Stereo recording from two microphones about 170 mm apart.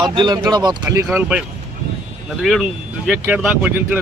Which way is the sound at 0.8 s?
15° right (ahead or behind).